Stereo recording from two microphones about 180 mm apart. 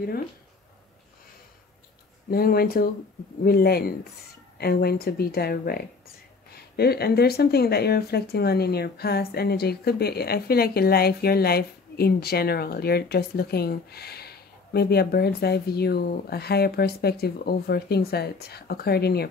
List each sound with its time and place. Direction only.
2.3 s speech: 55° left (ahead or behind)